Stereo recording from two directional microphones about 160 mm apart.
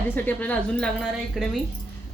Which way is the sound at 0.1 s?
10° left (ahead or behind).